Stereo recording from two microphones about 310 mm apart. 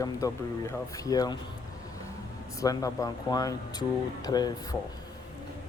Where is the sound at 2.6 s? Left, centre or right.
Centre.